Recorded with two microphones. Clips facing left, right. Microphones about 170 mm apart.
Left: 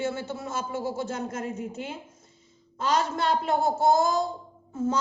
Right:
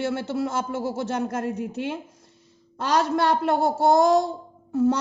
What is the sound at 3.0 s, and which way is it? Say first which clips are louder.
A woman's voice: right 9 dB; 70° right (ahead or behind).